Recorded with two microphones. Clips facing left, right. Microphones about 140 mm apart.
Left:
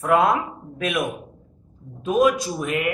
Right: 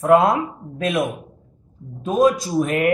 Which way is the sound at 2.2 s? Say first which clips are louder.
Right 3 dB; 40° right (ahead or behind).